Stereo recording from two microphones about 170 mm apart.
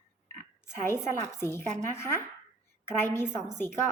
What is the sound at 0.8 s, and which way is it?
Speech, 15° left (ahead or behind).